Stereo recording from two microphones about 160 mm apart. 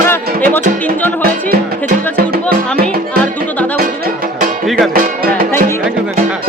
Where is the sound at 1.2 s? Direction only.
60° right (ahead or behind).